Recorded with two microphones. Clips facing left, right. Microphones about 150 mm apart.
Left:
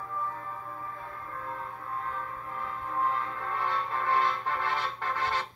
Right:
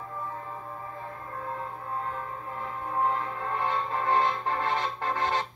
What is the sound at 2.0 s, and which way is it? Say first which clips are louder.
Music: right 2 dB; 30° right (ahead or behind).